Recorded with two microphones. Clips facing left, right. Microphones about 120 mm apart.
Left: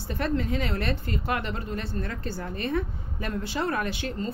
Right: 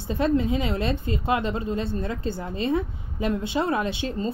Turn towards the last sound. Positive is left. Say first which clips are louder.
# right 3 dB
turn(degrees=-25)  # may be behind; listen again after turning